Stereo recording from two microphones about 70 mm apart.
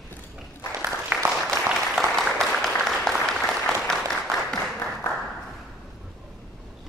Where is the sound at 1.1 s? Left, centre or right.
Right.